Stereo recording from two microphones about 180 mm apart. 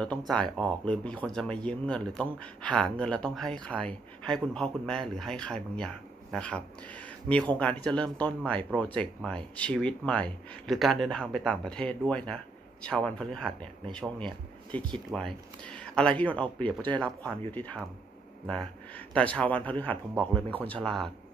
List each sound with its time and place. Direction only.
0.0 s speech: 5° left (ahead or behind)